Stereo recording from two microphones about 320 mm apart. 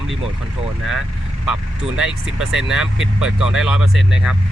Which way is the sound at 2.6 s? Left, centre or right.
Centre.